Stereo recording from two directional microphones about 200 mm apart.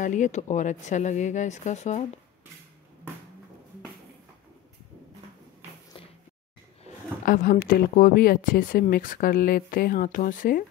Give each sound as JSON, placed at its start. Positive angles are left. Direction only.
{"t": 0.0, "sound": "speech", "side_deg": 40}
{"t": 7.2, "sound": "speech", "side_deg": 45}